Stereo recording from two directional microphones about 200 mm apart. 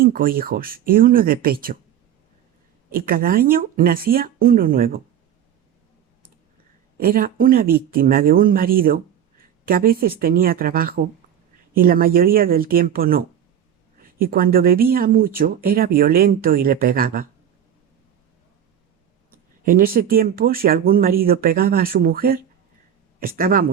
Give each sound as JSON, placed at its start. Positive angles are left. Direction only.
{"t": 0.0, "sound": "speech", "side_deg": -45}
{"t": 2.9, "sound": "speech", "side_deg": -45}
{"t": 7.0, "sound": "speech", "side_deg": -45}
{"t": 19.6, "sound": "speech", "side_deg": -45}